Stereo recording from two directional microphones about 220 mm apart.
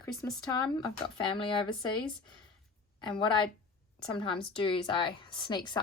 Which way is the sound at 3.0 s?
20° left (ahead or behind).